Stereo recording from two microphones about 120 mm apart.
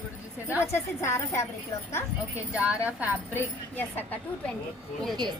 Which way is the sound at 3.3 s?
15° left (ahead or behind).